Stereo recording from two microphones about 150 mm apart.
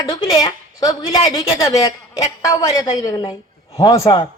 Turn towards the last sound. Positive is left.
turn(degrees=25)  # may be behind; listen again after turning